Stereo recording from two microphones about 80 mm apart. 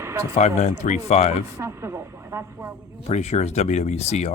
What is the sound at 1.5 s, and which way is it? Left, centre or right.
Speech, right.